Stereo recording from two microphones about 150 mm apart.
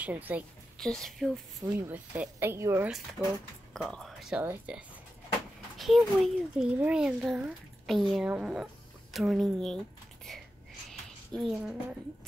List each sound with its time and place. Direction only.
0.0 s a woman's voice: 10° right (ahead or behind)
0.7 s a child's voice: 5° left (ahead or behind)
1.6 s a woman's voice: 15° right (ahead or behind)
3.2 s a child's voice: 5° right (ahead or behind)
4.4 s a woman's voice: 10° right (ahead or behind)
10.9 s a sound: centre (ahead or behind)